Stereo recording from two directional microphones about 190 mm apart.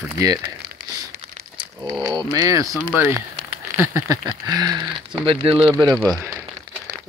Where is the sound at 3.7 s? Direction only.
15° right (ahead or behind).